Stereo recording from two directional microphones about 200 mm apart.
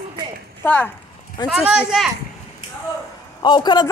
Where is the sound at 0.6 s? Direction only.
5° left (ahead or behind).